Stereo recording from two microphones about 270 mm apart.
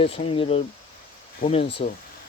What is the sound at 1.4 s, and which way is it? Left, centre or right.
Speech, left.